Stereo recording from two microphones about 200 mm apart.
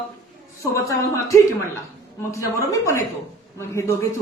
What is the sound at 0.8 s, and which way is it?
Speech, 15° left (ahead or behind).